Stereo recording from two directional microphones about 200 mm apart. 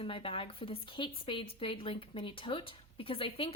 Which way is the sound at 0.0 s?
30° left (ahead or behind).